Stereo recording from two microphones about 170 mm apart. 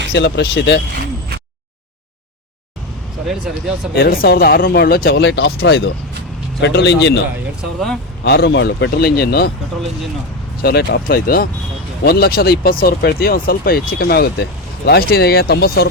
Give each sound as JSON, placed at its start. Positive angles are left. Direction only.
{"t": 0.1, "sound": "speech", "side_deg": 90}
{"t": 3.2, "sound": "speech", "side_deg": -5}
{"t": 3.9, "sound": "speech", "side_deg": 60}
{"t": 7.6, "sound": "speech", "side_deg": 0}
{"t": 8.2, "sound": "speech", "side_deg": 80}
{"t": 10.6, "sound": "speech", "side_deg": 65}